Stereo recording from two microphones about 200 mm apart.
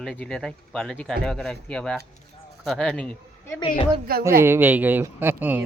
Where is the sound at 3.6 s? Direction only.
25° left (ahead or behind).